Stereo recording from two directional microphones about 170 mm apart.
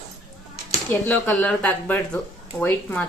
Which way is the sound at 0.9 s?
10° left (ahead or behind).